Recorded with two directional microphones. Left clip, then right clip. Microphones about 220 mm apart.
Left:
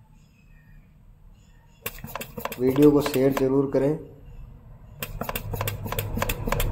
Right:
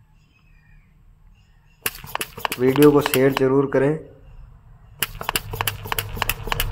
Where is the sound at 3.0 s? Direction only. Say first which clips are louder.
Right 4 dB; 5° right (ahead or behind).